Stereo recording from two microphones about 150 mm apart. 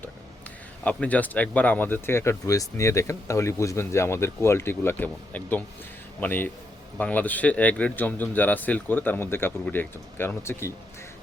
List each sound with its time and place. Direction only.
0.9 s speech: 10° left (ahead or behind)